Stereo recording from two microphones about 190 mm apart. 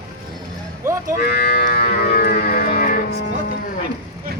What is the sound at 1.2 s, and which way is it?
Moo, 55° left (ahead or behind).